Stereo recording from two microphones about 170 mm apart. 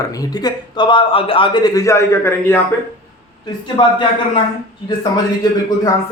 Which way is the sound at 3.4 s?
25° left (ahead or behind).